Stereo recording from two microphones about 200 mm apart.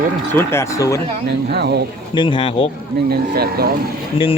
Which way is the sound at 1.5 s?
55° right (ahead or behind).